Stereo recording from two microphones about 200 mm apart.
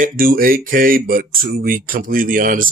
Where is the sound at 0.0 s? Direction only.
45° right (ahead or behind).